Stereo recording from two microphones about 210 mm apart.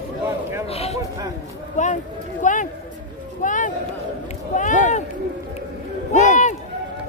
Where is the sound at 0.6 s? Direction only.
30° left (ahead or behind).